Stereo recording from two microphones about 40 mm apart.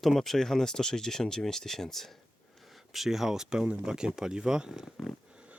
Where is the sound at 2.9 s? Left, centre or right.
Centre.